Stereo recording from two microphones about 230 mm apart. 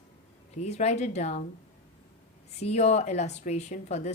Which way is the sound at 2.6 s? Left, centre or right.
Left.